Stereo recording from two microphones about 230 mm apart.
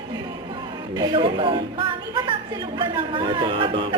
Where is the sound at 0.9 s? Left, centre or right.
Centre.